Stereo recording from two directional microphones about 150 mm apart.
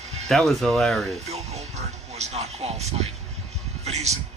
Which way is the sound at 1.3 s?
45° right (ahead or behind).